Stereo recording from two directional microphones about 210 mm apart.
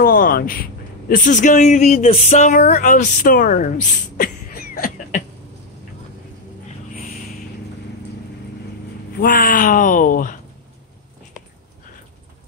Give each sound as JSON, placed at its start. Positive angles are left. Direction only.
{"t": 0.0, "sound": "a man's voice", "side_deg": 40}
{"t": 9.2, "sound": "speech", "side_deg": 40}